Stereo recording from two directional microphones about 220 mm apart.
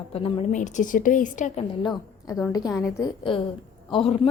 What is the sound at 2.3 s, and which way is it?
A woman's voice, 15° left (ahead or behind).